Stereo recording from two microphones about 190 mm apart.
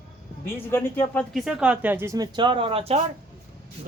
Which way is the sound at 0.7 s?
10° left (ahead or behind).